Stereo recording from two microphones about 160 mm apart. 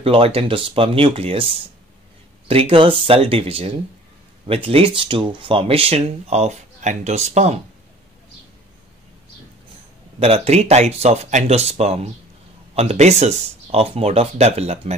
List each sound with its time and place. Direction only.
0.0 s speech: 35° right (ahead or behind)
10.1 s speech: 40° right (ahead or behind)